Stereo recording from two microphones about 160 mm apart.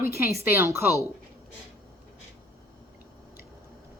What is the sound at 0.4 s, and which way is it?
Speech, 15° right (ahead or behind).